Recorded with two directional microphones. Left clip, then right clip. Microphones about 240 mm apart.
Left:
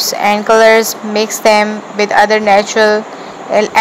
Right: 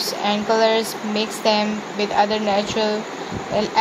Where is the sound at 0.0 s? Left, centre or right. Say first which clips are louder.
Left 10 dB; left.